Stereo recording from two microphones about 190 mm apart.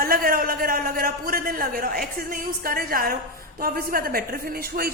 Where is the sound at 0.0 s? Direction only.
50° right (ahead or behind).